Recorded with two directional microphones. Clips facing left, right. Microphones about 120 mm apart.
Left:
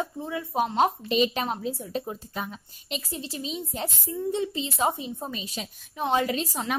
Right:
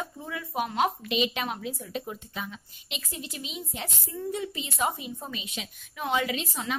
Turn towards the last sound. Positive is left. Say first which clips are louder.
# left 4 dB
turn(degrees=35)  # may be behind; listen again after turning